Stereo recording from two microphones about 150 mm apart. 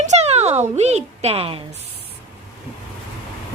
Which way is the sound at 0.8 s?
45° right (ahead or behind).